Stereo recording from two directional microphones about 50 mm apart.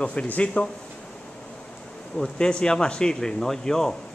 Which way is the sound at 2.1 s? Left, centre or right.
Centre.